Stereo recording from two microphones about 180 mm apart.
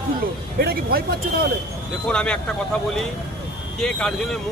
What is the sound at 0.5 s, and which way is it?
Speech, 60° right (ahead or behind).